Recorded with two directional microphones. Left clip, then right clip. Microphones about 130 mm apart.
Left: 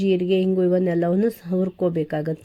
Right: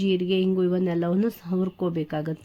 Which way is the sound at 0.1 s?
15° left (ahead or behind).